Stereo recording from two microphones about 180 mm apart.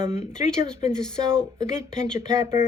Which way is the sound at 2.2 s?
15° right (ahead or behind).